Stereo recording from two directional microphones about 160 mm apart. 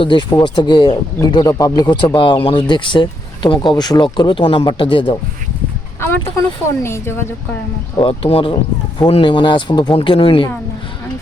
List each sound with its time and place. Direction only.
0.0 s speech: 30° left (ahead or behind)
6.7 s speech: 15° left (ahead or behind)
7.9 s speech: 35° left (ahead or behind)